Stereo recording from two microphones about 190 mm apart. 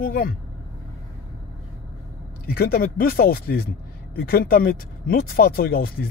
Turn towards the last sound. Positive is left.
turn(degrees=55)  # may be behind; listen again after turning